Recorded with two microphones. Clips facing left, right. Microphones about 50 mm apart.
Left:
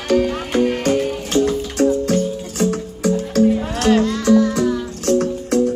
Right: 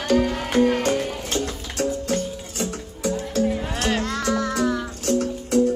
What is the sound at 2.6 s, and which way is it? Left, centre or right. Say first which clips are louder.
Music: left 8 dB; left.